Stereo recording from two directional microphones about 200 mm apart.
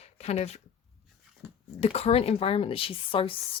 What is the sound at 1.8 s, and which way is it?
Speech, 30° left (ahead or behind).